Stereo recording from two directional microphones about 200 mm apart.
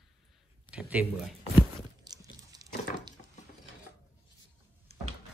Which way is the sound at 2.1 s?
20° right (ahead or behind).